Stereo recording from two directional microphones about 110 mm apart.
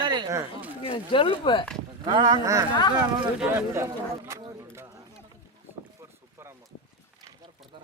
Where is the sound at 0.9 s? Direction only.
55° left (ahead or behind).